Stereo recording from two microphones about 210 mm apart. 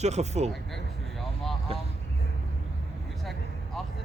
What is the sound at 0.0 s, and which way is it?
Speech, 35° right (ahead or behind).